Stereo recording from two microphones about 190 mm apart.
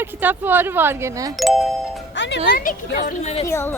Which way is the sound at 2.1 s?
75° left (ahead or behind).